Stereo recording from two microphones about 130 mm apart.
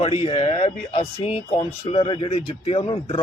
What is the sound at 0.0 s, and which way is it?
Speech, 45° left (ahead or behind).